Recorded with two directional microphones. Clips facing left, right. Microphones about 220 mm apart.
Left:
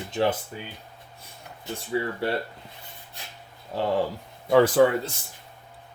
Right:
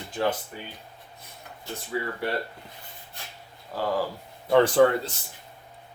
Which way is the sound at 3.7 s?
25° left (ahead or behind).